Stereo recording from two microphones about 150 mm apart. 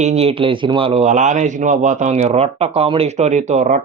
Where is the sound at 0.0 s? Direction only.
45° right (ahead or behind).